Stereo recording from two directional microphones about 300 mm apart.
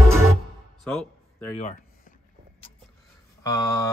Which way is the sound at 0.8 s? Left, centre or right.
Centre.